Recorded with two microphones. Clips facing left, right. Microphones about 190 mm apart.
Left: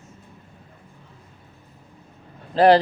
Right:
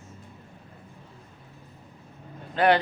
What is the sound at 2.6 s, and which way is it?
Speech, 35° left (ahead or behind).